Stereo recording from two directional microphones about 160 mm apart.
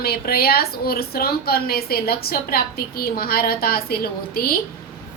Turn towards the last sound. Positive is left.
turn(degrees=70)  # may be behind; listen again after turning